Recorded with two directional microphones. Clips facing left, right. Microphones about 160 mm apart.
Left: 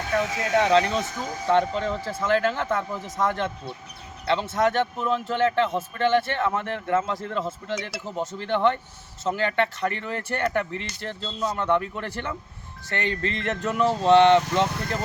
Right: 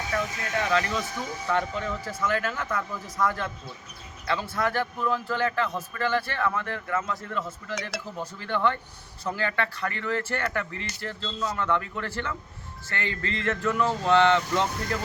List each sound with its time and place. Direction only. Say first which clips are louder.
0.2 s speech: left 10 dB; 85° left
0.7 s a man's voice: left 5 dB; 25° left (ahead or behind)